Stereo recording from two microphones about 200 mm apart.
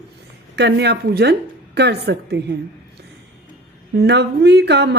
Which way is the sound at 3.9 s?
55° right (ahead or behind).